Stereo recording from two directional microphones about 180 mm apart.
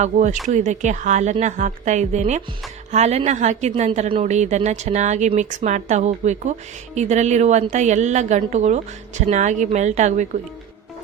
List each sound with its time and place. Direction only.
0.0 s a woman's voice: 40° right (ahead or behind)